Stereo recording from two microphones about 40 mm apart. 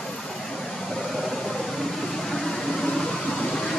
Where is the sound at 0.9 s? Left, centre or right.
Centre.